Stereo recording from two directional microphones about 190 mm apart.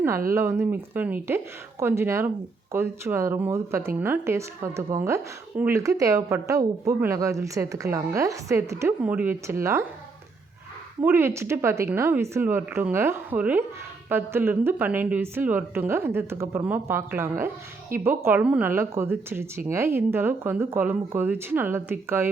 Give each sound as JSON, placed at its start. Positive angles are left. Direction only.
{"t": 0.3, "sound": "speech", "side_deg": -15}
{"t": 11.0, "sound": "speech", "side_deg": -10}